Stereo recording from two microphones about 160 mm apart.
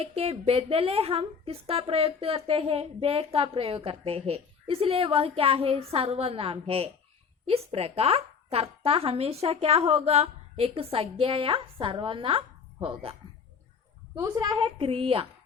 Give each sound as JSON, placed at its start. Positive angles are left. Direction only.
{"t": 0.0, "sound": "a woman's voice", "side_deg": -40}
{"t": 14.2, "sound": "a woman's voice", "side_deg": -20}
{"t": 14.6, "sound": "a woman's voice", "side_deg": -35}